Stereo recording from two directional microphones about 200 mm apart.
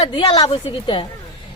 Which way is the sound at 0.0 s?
25° left (ahead or behind).